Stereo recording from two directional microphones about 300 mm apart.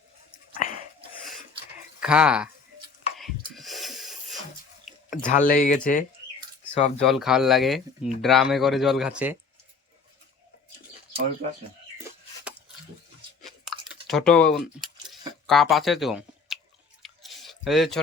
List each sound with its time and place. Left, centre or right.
2.0 s speech: centre
3.2 s a sound: centre
5.2 s speech: left
7.0 s speech: centre
13.4 s chewing: centre
15.4 s speech: centre
17.0 s chewing: centre